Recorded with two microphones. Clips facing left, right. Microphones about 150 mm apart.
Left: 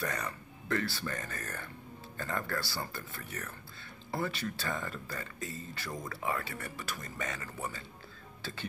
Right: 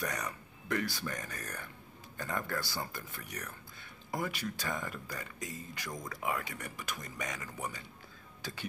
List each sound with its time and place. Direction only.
0.0 s speech: 15° right (ahead or behind)